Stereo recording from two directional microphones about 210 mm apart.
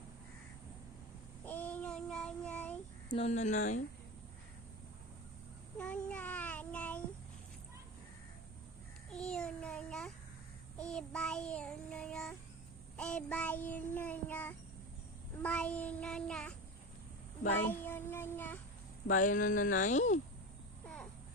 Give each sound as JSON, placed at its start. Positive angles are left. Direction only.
{"t": 1.5, "sound": "child singing", "side_deg": 10}
{"t": 3.1, "sound": "speech", "side_deg": 30}
{"t": 5.7, "sound": "child singing", "side_deg": 5}
{"t": 9.1, "sound": "child singing", "side_deg": 5}
{"t": 17.6, "sound": "child singing", "side_deg": 10}
{"t": 19.0, "sound": "speech", "side_deg": 40}
{"t": 20.8, "sound": "babbling", "side_deg": 5}